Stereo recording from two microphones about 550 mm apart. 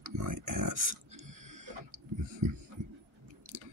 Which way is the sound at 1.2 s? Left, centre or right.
Centre.